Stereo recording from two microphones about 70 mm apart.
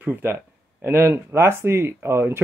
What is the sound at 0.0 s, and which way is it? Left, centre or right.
Speech, right.